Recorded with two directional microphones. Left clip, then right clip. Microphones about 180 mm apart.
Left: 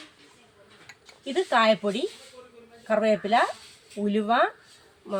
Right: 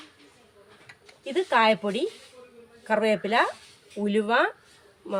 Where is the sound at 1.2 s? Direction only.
20° right (ahead or behind).